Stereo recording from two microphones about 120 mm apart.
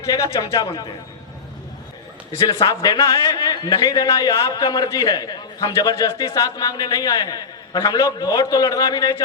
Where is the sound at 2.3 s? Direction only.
25° left (ahead or behind).